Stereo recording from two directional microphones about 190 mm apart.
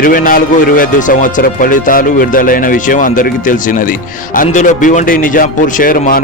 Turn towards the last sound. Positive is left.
turn(degrees=45)  # may be behind; listen again after turning